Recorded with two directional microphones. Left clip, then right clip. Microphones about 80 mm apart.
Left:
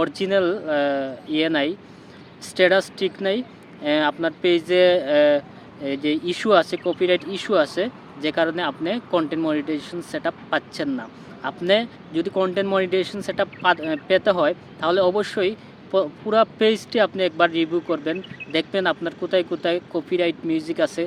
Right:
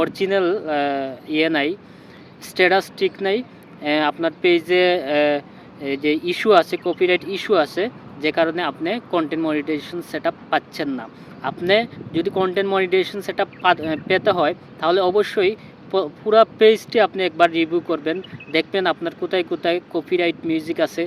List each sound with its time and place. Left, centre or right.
0.0 s speech: left